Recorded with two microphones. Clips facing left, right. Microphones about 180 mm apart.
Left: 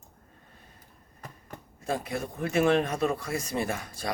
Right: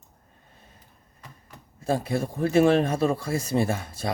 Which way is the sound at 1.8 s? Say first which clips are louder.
Right 6 dB; 30° right (ahead or behind).